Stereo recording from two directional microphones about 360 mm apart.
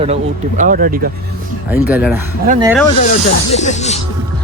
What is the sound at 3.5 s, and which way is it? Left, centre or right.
Music, centre.